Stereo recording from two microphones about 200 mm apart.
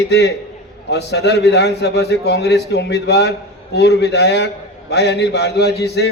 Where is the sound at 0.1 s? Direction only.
55° left (ahead or behind).